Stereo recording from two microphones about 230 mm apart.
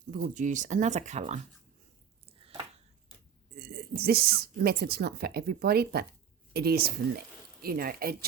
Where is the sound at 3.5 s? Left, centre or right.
Right.